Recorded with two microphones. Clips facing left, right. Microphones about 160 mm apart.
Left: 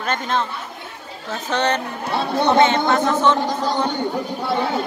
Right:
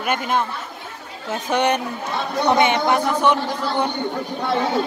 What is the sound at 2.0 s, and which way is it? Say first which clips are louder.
Speech: left 4 dB; 30° left (ahead or behind).